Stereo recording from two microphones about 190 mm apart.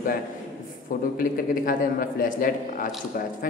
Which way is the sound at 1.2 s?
45° left (ahead or behind).